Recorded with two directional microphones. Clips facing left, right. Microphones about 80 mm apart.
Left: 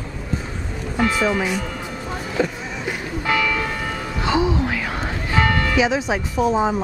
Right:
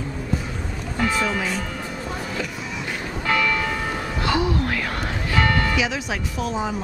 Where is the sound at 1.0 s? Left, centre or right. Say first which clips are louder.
Left 3 dB; centre.